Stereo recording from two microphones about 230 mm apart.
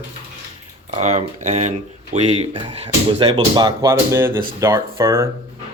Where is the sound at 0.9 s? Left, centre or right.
Right; by 5.2 s centre.